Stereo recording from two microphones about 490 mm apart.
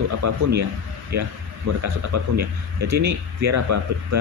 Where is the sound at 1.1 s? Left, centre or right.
Right.